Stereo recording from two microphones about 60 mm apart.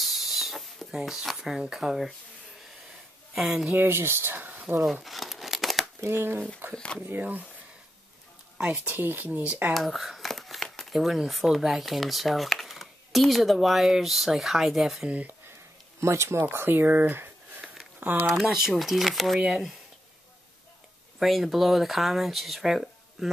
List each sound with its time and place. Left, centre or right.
0.0 s hiss: centre
0.9 s speech: centre
3.3 s speech: centre
3.7 s speech: right
5.0 s crumpling: centre
5.9 s speech: right
6.7 s speech: centre
7.0 s speech: right
8.8 s speech: right
9.8 s speech: centre
15.0 s speech: right
16.0 s speech: right
18.5 s speech: centre
21.2 s speech: centre